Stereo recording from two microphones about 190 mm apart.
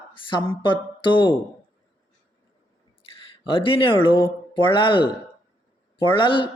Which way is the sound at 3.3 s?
25° left (ahead or behind).